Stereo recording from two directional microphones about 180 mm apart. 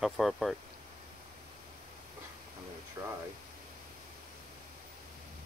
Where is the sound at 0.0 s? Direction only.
Centre (ahead or behind).